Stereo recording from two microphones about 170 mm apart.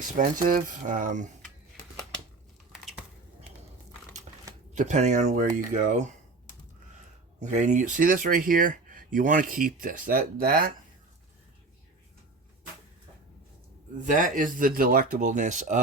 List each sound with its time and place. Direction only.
0.4 s speech: 50° right (ahead or behind)
4.3 s typing: 35° right (ahead or behind)
4.7 s speech: 45° right (ahead or behind)
7.3 s speech: 45° right (ahead or behind)
14.0 s speech: 50° right (ahead or behind)